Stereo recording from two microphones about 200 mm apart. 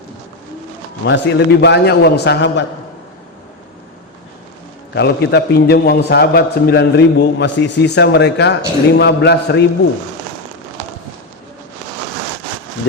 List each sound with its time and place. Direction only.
1.0 s a man's voice: 60° left (ahead or behind)
4.9 s a man's voice: 55° left (ahead or behind)